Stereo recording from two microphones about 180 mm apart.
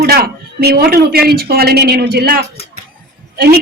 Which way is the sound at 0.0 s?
60° right (ahead or behind).